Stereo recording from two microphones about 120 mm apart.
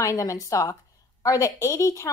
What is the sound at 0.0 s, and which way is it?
A woman's voice, 25° left (ahead or behind).